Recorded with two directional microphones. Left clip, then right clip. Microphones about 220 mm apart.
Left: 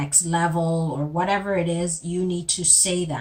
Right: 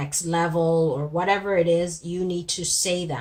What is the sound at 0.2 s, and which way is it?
Speech, 30° right (ahead or behind).